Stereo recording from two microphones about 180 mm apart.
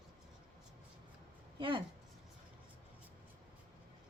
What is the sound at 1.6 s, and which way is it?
Speech, 30° right (ahead or behind).